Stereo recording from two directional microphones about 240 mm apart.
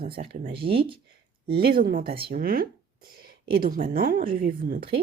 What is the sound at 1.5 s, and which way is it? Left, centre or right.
A woman's voice, right.